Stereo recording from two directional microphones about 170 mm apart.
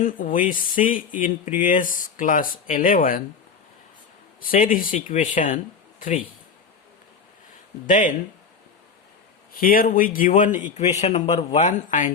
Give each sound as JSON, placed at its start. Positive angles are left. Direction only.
{"t": 0.0, "sound": "speech", "side_deg": 50}
{"t": 4.5, "sound": "speech", "side_deg": 55}
{"t": 7.9, "sound": "speech", "side_deg": 50}
{"t": 9.6, "sound": "speech", "side_deg": 55}